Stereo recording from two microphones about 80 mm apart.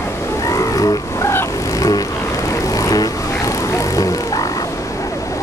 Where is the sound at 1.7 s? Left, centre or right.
Left.